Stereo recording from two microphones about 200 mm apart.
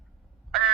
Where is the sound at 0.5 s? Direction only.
Centre (ahead or behind).